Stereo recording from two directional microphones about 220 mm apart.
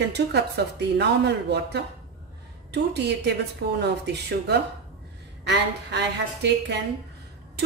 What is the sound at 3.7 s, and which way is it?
A woman's voice, 50° right (ahead or behind).